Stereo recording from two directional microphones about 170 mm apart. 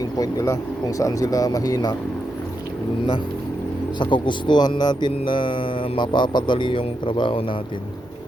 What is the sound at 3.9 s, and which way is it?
Speech, 30° left (ahead or behind).